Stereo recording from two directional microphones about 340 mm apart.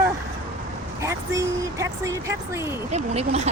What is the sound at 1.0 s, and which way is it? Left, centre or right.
Speech, centre.